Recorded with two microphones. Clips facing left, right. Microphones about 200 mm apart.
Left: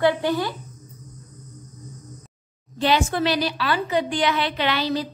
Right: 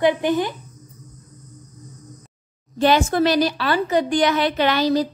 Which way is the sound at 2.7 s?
45° right (ahead or behind).